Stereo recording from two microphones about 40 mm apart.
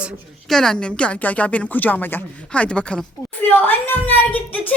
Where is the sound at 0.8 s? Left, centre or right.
Left.